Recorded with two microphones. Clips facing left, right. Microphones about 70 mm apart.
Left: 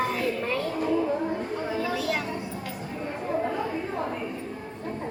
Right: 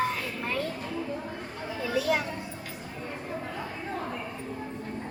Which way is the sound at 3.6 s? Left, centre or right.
Left.